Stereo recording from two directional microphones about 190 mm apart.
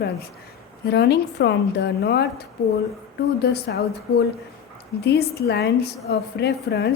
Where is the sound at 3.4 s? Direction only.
60° left (ahead or behind).